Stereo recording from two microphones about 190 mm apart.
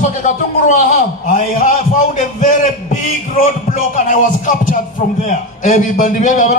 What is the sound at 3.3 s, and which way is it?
Music, 45° left (ahead or behind).